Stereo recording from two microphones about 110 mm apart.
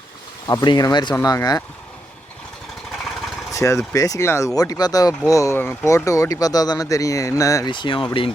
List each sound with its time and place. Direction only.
0.4 s speech: 40° left (ahead or behind)
3.5 s speech: 30° left (ahead or behind)
7.7 s speech: 50° left (ahead or behind)